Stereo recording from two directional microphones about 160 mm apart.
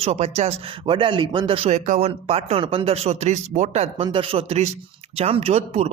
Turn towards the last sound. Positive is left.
turn(degrees=-40)  # may be behind; listen again after turning